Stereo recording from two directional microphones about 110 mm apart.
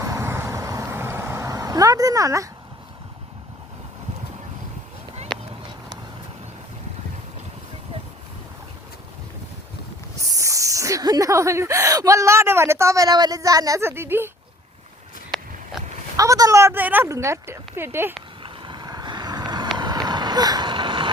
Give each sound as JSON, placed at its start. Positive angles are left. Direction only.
{"t": 0.0, "sound": "vehicle", "side_deg": -25}
{"t": 10.2, "sound": "speech", "side_deg": -30}
{"t": 16.1, "sound": "a woman's voice", "side_deg": -30}
{"t": 18.4, "sound": "boat", "side_deg": -45}
{"t": 19.7, "sound": "vehicle", "side_deg": -40}